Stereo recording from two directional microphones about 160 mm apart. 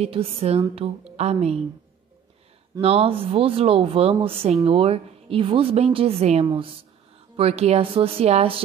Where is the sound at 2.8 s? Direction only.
40° right (ahead or behind).